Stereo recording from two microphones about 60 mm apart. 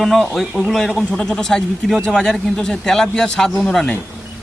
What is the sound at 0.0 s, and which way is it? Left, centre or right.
Speech, centre.